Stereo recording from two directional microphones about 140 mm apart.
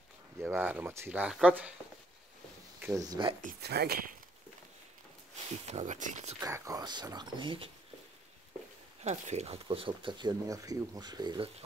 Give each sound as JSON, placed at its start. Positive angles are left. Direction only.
{"t": 0.4, "sound": "speech", "side_deg": -15}
{"t": 3.0, "sound": "speech", "side_deg": -30}
{"t": 3.3, "sound": "speech", "side_deg": -80}
{"t": 5.7, "sound": "speech", "side_deg": -55}
{"t": 6.4, "sound": "speech", "side_deg": -25}
{"t": 9.0, "sound": "speech", "side_deg": -55}